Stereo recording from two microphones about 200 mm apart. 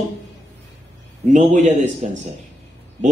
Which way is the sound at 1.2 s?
40° right (ahead or behind).